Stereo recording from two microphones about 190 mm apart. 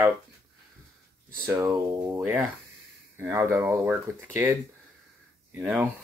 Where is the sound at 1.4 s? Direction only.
15° right (ahead or behind).